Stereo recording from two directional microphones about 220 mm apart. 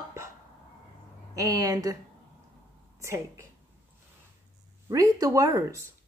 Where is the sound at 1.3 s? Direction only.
15° right (ahead or behind).